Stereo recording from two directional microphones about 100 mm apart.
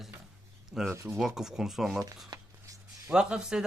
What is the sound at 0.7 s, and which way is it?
Speech, 5° right (ahead or behind).